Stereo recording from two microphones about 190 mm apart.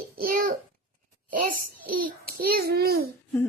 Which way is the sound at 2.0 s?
50° right (ahead or behind).